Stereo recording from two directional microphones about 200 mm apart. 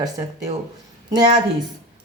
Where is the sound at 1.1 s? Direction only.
20° right (ahead or behind).